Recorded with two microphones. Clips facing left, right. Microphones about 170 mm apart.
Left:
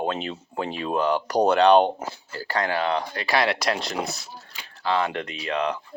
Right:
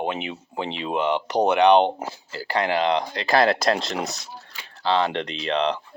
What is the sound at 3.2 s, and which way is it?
Speech, 45° right (ahead or behind).